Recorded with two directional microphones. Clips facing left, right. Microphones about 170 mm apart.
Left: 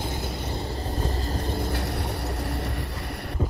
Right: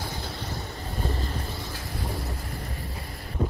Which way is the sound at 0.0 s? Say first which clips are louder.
Left 4 dB; 25° left (ahead or behind).